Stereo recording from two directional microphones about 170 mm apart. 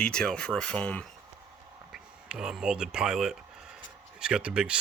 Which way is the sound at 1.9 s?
5° right (ahead or behind).